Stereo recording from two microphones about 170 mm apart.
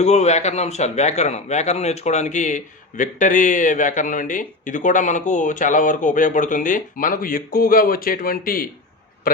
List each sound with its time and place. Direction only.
0.0 s a man's voice: 40° left (ahead or behind)